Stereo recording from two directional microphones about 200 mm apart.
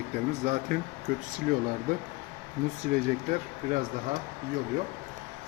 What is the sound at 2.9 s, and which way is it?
Speech, 40° right (ahead or behind).